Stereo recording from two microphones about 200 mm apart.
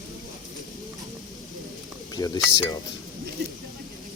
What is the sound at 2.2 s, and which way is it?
Speech, 15° left (ahead or behind).